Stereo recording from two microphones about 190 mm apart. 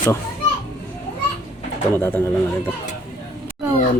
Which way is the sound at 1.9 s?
10° left (ahead or behind).